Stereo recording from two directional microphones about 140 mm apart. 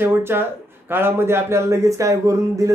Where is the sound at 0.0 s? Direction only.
15° right (ahead or behind).